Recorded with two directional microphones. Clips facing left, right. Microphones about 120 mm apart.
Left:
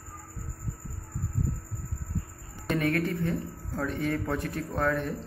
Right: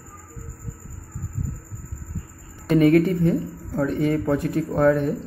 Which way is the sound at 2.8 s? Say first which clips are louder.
Right 12 dB; 15° right (ahead or behind).